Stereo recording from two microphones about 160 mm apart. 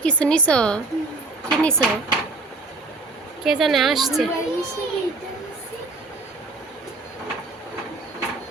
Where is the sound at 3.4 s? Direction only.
Centre (ahead or behind).